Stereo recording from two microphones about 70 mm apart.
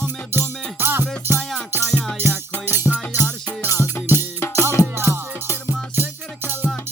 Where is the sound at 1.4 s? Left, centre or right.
Centre.